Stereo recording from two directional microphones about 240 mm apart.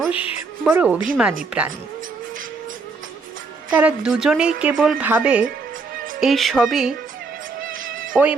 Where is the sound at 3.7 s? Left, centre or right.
Centre.